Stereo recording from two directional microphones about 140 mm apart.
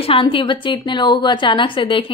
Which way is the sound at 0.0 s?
40° left (ahead or behind).